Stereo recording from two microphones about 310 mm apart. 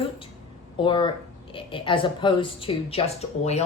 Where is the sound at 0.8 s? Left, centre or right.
Centre.